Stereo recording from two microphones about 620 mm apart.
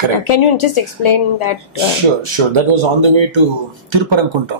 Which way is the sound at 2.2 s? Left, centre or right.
Right.